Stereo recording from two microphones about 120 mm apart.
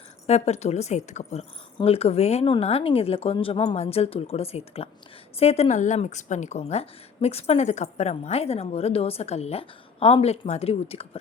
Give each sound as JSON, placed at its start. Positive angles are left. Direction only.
{"t": 0.3, "sound": "a woman's voice", "side_deg": 65}
{"t": 3.8, "sound": "a woman's voice", "side_deg": 55}